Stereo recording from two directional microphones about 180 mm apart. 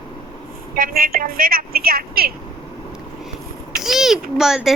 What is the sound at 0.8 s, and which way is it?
A woman's voice, 55° right (ahead or behind).